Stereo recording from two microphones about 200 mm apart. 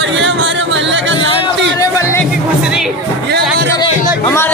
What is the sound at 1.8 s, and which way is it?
Music, 15° left (ahead or behind).